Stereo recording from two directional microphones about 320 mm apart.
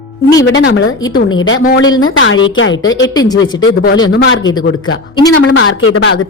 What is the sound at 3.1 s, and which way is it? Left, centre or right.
Speech, centre.